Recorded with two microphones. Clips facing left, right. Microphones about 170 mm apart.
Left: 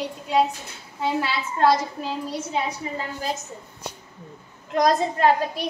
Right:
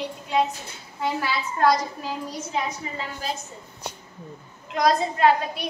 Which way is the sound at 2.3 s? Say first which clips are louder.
Left 1 dB; 30° left (ahead or behind).